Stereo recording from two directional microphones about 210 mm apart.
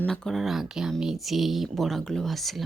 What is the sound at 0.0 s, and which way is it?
Speech, 5° left (ahead or behind).